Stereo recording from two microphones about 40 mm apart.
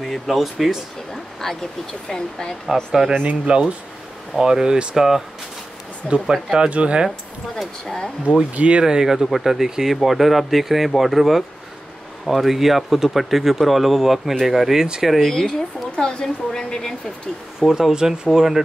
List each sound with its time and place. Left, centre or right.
0.0 s speech: centre
1.1 s a sound: centre
2.0 s a woman's voice: centre
2.7 s speech: centre
3.3 s speech: right
4.4 s speech: centre
4.9 s speech: centre
6.2 s speech: centre
6.7 s speech: right
8.5 s speech: right
8.8 s speech: centre
15.2 s a woman's voice: centre
17.6 s speech: centre